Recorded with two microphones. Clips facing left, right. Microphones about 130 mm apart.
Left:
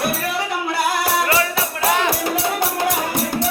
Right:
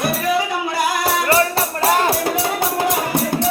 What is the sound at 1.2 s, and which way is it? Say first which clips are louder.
Music: right 3 dB; 35° right (ahead or behind).